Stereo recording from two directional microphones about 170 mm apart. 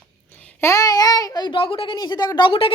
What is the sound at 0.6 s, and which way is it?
A child's voice, 20° left (ahead or behind).